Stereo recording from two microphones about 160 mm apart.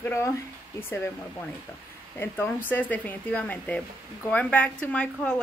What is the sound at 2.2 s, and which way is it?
Speech, 15° left (ahead or behind).